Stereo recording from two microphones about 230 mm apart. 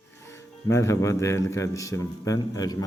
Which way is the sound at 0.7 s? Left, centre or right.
Centre.